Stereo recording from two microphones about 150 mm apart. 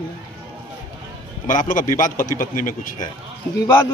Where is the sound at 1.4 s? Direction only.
65° left (ahead or behind).